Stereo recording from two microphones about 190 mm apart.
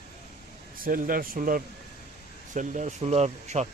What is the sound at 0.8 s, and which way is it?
A man's voice, 50° right (ahead or behind).